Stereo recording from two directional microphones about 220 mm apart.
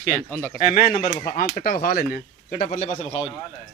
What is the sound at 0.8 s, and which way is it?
Speech, 45° left (ahead or behind).